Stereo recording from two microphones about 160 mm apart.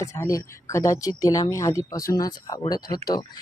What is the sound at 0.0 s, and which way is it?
Speech, 20° left (ahead or behind).